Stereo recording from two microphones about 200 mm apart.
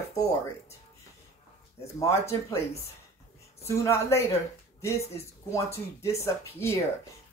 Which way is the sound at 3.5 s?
15° left (ahead or behind).